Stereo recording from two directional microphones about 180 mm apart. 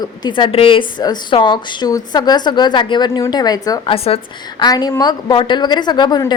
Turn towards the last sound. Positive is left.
turn(degrees=20)  # may be behind; listen again after turning